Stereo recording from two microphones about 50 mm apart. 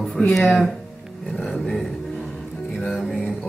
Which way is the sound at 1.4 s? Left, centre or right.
Centre.